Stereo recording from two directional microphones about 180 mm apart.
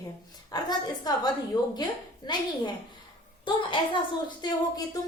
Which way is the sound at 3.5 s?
25° left (ahead or behind).